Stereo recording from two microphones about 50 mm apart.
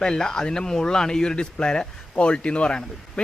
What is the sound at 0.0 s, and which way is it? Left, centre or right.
A man's voice, centre.